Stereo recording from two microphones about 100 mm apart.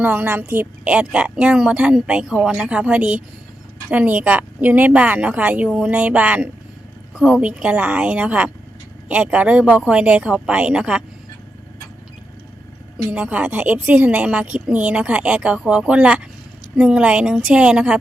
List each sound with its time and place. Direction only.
0.0 s a woman's voice: 15° right (ahead or behind)
13.1 s a woman's voice: 15° right (ahead or behind)